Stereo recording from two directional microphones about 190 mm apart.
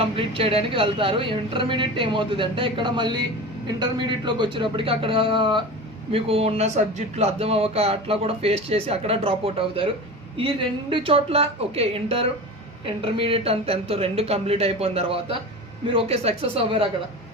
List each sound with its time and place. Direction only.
0.0 s speech: 30° right (ahead or behind)